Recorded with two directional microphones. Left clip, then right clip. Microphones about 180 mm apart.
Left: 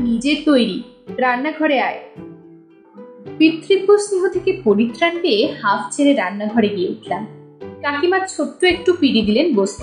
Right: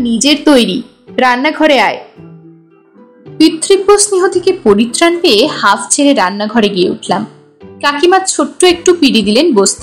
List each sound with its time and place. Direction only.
0.2 s a woman's voice: 35° right (ahead or behind)
3.3 s a woman's voice: 40° right (ahead or behind)